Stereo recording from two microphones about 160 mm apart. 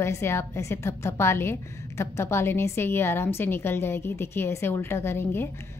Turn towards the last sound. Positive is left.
turn(degrees=15)  # may be behind; listen again after turning